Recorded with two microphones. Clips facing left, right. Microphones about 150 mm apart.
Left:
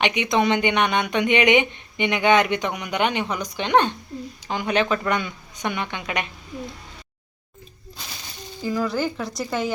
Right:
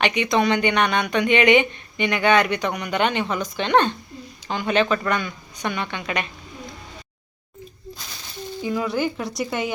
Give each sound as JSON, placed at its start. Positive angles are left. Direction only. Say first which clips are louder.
{"t": 0.0, "sound": "speech", "louder": "right 1 dB", "side_deg": 20}
{"t": 8.6, "sound": "speech", "louder": "even", "side_deg": 0}